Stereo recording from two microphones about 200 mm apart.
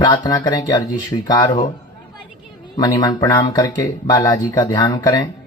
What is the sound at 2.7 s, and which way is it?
Speech, 20° left (ahead or behind).